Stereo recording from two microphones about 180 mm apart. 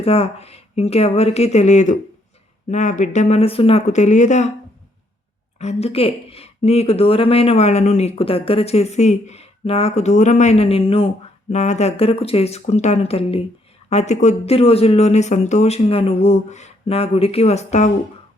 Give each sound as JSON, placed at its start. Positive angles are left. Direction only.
{"t": 0.0, "sound": "speech", "side_deg": 35}
{"t": 5.5, "sound": "speech", "side_deg": 35}